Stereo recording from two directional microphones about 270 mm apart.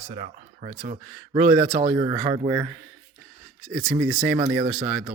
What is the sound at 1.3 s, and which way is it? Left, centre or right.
Speech, centre.